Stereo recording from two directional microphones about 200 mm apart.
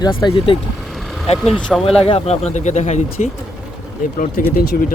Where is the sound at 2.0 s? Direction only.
30° left (ahead or behind).